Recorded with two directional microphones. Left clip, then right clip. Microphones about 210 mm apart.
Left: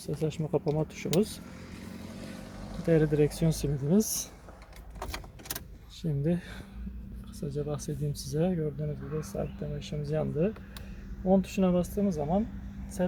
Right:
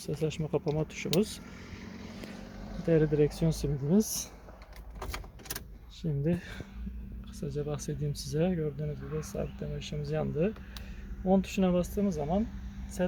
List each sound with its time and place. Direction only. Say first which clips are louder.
0.0 s speech: even; centre (ahead or behind)
1.8 s vehicle: left 1 dB; 50° left (ahead or behind)
2.8 s speech: left 1 dB; centre (ahead or behind)
6.0 s speech: left 1 dB; centre (ahead or behind)